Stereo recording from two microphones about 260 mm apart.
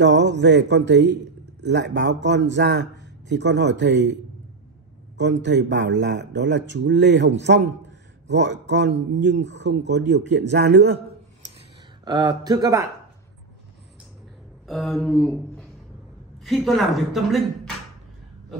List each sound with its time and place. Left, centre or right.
0.0 s a man's voice: right
12.0 s speech: centre
14.7 s a woman's voice: centre